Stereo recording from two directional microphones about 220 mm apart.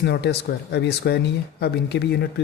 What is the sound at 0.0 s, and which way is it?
Speech, 50° left (ahead or behind).